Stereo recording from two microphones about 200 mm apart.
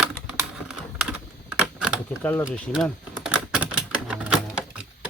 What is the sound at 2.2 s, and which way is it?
Speech, 10° left (ahead or behind).